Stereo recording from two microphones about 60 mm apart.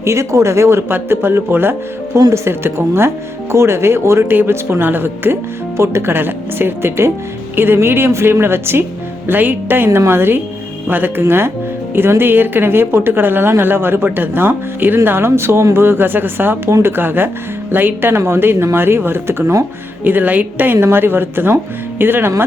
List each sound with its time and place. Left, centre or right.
0.0 s speech: right
20.1 s speech: right